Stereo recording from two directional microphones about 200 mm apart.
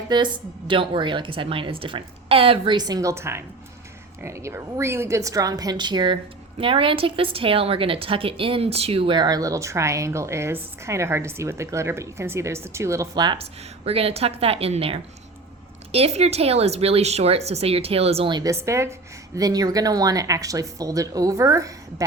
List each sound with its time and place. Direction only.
0.1 s a woman's voice: 25° right (ahead or behind)